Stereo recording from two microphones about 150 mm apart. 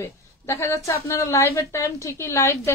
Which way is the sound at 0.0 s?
20° left (ahead or behind).